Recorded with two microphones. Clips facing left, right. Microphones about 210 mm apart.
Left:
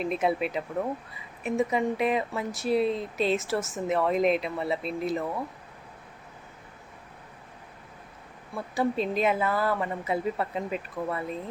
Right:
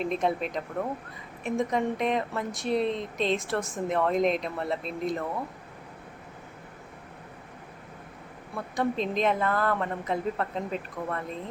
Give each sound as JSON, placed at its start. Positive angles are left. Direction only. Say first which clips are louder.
{"t": 0.0, "sound": "speech", "louder": "left 1 dB", "side_deg": 5}
{"t": 8.5, "sound": "a woman's voice", "louder": "left 1 dB", "side_deg": 5}